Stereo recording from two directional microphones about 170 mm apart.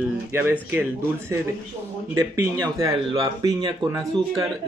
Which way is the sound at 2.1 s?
20° right (ahead or behind).